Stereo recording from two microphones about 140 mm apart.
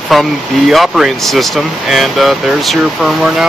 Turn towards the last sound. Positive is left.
turn(degrees=0)  # may be behind; listen again after turning